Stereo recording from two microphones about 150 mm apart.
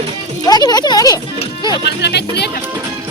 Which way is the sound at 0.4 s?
25° left (ahead or behind).